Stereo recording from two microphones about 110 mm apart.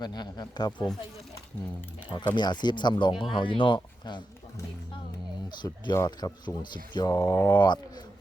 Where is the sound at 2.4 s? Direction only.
40° left (ahead or behind).